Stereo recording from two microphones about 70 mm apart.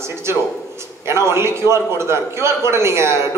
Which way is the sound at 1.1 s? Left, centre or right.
Right.